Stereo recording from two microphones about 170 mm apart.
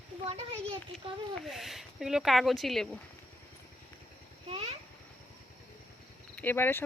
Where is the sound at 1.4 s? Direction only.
Centre (ahead or behind).